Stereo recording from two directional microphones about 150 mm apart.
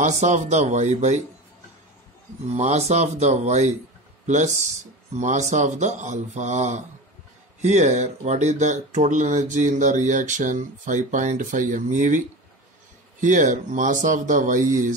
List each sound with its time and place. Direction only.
0.0 s speech: 55° right (ahead or behind)
2.5 s speech: 50° right (ahead or behind)
5.2 s speech: 55° right (ahead or behind)
13.2 s speech: 60° right (ahead or behind)